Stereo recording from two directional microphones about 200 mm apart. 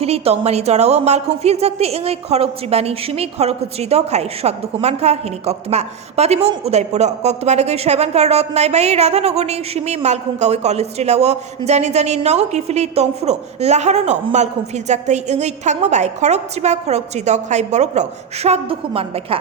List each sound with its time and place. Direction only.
0.0 s a woman's voice: 30° right (ahead or behind)